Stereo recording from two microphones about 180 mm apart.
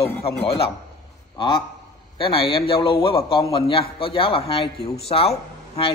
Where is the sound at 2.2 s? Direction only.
30° left (ahead or behind).